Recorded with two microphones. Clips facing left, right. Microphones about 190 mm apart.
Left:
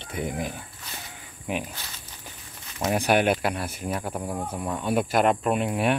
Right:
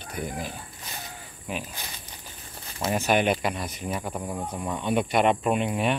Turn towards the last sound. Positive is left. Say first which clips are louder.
# left 1 dB
turn(degrees=5)  # may be behind; listen again after turning